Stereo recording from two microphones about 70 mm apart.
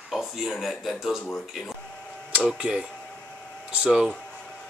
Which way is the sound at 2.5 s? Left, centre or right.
Centre.